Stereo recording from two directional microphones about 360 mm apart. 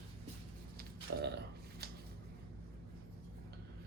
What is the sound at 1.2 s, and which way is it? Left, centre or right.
Burping, right.